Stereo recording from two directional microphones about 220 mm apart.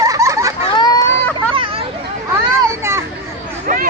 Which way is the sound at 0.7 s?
15° left (ahead or behind).